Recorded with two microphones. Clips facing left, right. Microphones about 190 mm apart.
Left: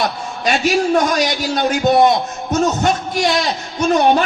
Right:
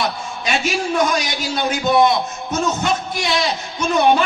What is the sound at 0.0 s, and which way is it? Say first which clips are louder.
A man's voice: left 3 dB; 40° left (ahead or behind).